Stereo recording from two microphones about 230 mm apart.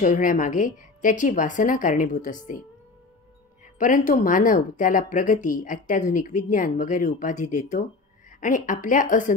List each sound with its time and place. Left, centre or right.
0.0 s speech: left
3.7 s speech: left